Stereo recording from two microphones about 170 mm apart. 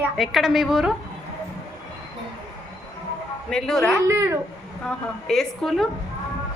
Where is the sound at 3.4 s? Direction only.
5° left (ahead or behind).